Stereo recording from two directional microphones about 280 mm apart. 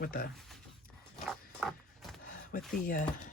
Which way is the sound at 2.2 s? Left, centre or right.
Left.